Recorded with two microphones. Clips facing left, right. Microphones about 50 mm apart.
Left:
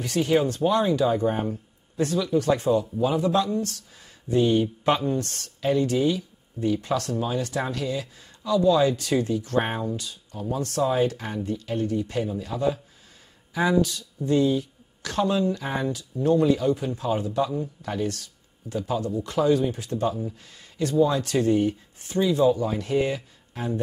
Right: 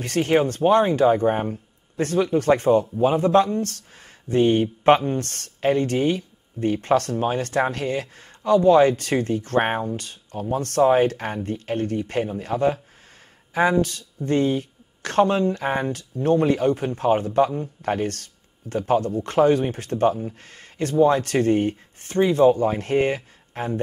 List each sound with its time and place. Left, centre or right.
0.0 s speech: right